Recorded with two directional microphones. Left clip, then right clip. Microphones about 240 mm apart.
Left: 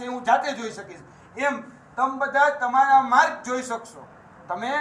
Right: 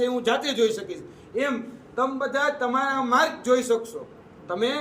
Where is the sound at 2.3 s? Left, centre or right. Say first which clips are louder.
Left 8 dB; right.